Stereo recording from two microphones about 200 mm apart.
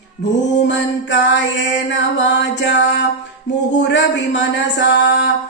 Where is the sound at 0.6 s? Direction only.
60° left (ahead or behind).